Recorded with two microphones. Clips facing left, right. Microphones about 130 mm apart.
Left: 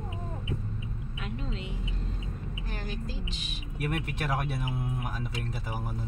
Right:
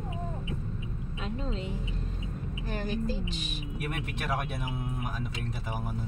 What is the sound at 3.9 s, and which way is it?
Speech, centre (ahead or behind).